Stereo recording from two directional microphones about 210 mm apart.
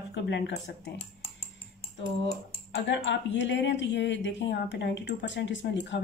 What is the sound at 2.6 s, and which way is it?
Speech, 60° left (ahead or behind).